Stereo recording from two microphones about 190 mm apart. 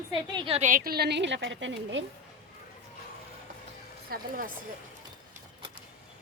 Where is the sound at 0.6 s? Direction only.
45° right (ahead or behind); by 2.0 s 80° right.